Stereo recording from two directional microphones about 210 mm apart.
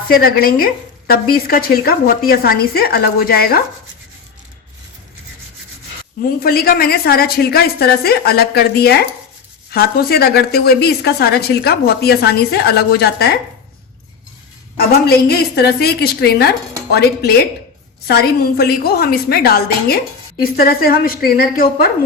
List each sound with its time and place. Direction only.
0.1 s a woman's voice: 45° left (ahead or behind)
6.4 s a woman's voice: 45° left (ahead or behind)
14.8 s a woman's voice: 50° left (ahead or behind)